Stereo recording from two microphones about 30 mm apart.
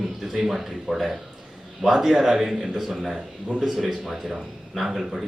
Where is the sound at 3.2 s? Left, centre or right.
Right.